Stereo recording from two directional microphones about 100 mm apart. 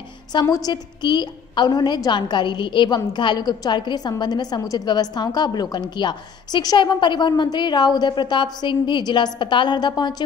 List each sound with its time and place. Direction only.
0.3 s a woman's voice: 40° left (ahead or behind)